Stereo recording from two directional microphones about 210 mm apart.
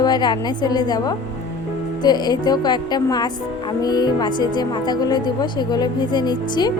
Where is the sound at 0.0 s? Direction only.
20° left (ahead or behind).